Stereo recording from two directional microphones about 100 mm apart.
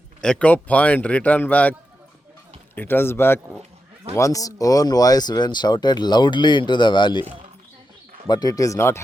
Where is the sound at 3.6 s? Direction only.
90° right.